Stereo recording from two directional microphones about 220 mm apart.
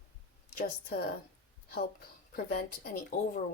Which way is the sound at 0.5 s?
40° left (ahead or behind).